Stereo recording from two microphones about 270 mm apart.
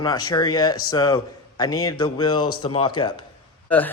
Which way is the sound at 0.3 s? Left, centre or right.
Centre.